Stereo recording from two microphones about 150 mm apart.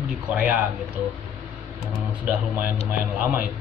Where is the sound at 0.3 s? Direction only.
10° right (ahead or behind).